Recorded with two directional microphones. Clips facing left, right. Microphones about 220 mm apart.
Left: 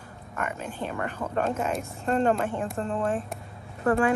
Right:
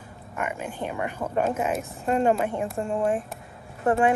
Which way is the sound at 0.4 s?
10° right (ahead or behind).